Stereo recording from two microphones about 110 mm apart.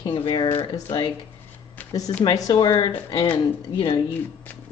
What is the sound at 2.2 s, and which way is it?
Speech, 40° left (ahead or behind).